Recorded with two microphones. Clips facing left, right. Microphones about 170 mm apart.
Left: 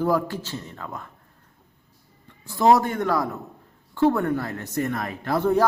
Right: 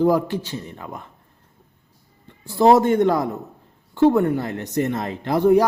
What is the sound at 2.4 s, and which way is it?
Speech, 30° right (ahead or behind).